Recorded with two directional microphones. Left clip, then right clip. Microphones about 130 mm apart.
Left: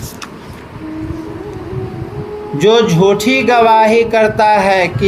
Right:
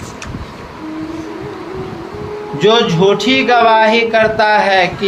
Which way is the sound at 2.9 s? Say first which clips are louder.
Even; 90° left.